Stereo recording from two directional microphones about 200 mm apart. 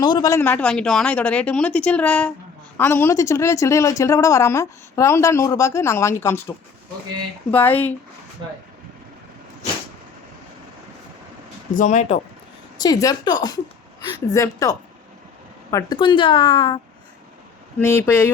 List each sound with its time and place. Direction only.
0.0 s speech: 20° left (ahead or behind)
7.5 s speech: 10° left (ahead or behind)
11.7 s speech: 40° left (ahead or behind)
12.8 s a woman's voice: 20° left (ahead or behind)
17.7 s speech: 10° left (ahead or behind)